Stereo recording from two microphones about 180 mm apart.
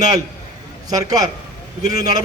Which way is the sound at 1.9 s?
20° right (ahead or behind).